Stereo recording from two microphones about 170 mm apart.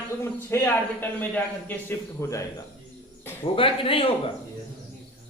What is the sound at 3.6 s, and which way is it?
Speech, 30° left (ahead or behind).